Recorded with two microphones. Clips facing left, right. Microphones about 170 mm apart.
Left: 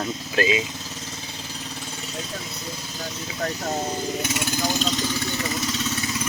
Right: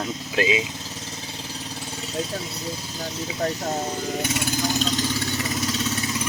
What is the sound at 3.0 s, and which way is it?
Speech, 25° right (ahead or behind).